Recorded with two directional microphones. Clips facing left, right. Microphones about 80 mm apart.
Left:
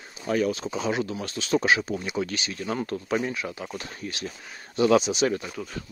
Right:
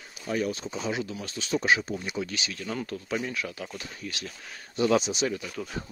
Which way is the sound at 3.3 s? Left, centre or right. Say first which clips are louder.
Left 2 dB; left.